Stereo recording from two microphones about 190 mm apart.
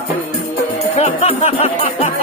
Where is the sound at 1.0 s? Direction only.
30° left (ahead or behind).